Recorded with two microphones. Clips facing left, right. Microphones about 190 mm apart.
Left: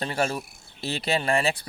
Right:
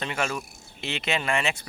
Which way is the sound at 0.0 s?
35° left (ahead or behind).